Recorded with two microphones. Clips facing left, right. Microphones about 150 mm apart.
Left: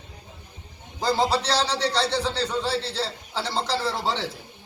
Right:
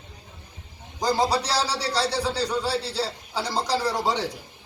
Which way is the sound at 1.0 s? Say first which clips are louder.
Even; 10° right (ahead or behind).